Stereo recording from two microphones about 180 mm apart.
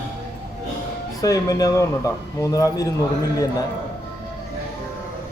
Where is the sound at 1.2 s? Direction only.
20° left (ahead or behind).